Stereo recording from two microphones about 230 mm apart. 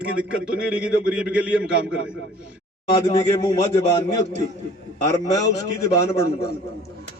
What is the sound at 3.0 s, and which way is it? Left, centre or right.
A man's voice, centre.